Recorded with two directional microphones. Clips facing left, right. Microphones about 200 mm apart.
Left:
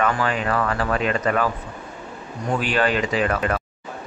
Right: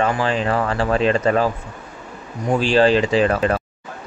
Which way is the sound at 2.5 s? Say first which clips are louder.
Right 6 dB; 30° right (ahead or behind).